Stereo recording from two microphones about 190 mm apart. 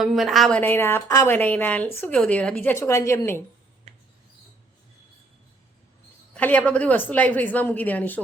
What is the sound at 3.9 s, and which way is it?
Mouse, 30° right (ahead or behind).